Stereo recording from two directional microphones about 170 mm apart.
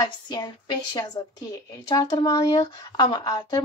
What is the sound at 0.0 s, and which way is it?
Speech, 25° left (ahead or behind).